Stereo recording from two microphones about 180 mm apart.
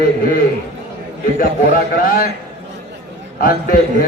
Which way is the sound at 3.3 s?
50° left (ahead or behind).